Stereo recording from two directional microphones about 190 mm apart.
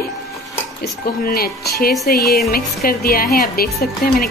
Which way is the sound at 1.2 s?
50° left (ahead or behind).